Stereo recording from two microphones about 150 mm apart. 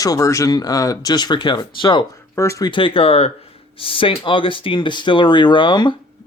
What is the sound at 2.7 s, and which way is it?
Speech, 35° left (ahead or behind).